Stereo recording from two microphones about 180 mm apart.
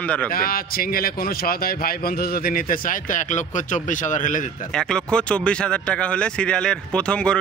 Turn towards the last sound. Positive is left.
turn(degrees=5)  # may be behind; listen again after turning